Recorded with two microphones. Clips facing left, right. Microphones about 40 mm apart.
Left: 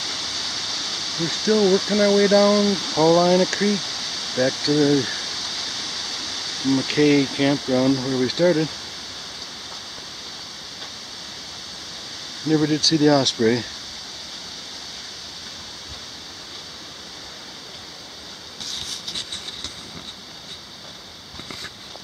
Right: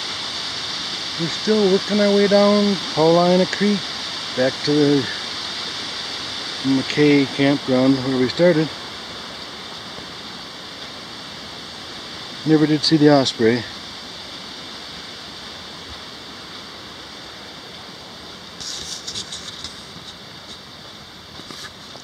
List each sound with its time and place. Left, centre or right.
0.0 s speech: centre
12.4 s speech: centre